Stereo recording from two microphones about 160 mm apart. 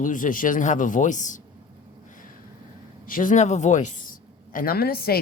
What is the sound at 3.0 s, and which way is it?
Speech, 55° left (ahead or behind).